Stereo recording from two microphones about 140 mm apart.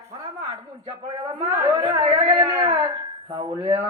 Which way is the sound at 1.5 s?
30° right (ahead or behind).